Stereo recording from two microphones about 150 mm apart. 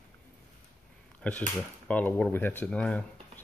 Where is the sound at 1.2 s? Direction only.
10° left (ahead or behind).